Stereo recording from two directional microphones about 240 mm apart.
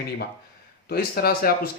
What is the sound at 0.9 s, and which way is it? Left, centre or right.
Speech, left.